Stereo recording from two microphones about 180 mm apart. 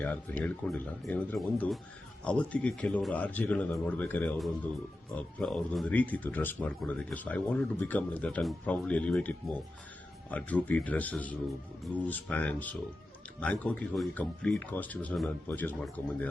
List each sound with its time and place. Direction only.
0.0 s speech: 10° left (ahead or behind)